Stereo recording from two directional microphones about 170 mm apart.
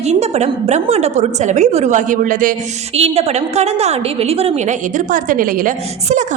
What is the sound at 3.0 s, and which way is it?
A woman's voice, 40° right (ahead or behind).